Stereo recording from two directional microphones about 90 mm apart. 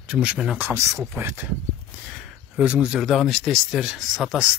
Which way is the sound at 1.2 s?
25° right (ahead or behind).